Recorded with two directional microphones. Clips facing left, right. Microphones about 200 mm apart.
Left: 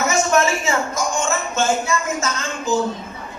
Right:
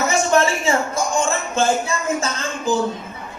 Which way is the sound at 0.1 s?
30° right (ahead or behind).